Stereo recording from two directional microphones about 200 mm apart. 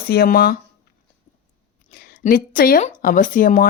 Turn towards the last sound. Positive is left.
turn(degrees=45)  # may be behind; listen again after turning